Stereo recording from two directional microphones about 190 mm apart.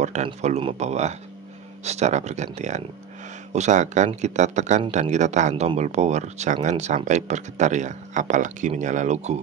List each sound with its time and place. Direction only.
0.0 s speech: 35° right (ahead or behind)